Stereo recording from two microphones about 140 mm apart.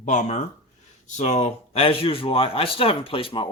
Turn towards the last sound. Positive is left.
turn(degrees=40)  # may be behind; listen again after turning